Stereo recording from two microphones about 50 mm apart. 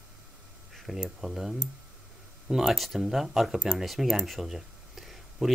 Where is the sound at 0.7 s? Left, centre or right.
Centre.